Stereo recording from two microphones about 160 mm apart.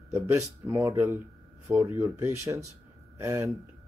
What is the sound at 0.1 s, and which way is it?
Speech, 15° right (ahead or behind).